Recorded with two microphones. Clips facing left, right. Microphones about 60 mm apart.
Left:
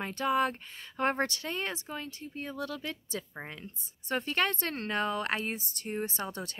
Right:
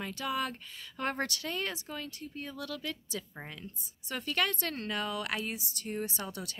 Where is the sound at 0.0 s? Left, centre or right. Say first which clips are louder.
Left 6 dB; left.